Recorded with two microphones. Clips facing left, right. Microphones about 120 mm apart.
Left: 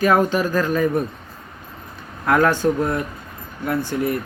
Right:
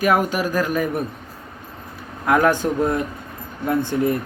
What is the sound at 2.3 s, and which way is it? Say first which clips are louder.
Speech: even; 15° right (ahead or behind).